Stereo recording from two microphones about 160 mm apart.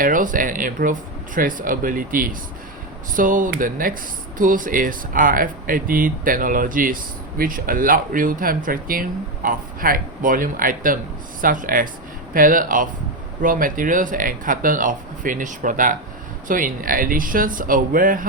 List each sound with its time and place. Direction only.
0.0 s speech: 55° right (ahead or behind)